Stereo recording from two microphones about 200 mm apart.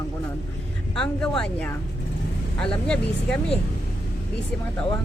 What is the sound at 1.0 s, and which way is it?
Speech, 5° left (ahead or behind).